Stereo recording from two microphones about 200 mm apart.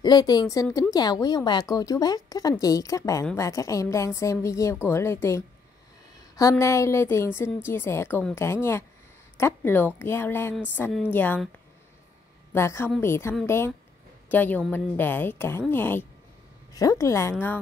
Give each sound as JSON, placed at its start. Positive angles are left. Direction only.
{"t": 0.0, "sound": "a woman's voice", "side_deg": 20}
{"t": 6.5, "sound": "speech", "side_deg": 15}
{"t": 12.5, "sound": "speech", "side_deg": 15}